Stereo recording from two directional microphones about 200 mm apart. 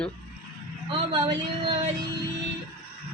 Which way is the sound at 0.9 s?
25° right (ahead or behind).